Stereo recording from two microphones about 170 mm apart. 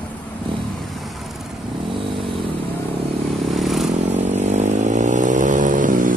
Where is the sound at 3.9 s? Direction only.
40° right (ahead or behind).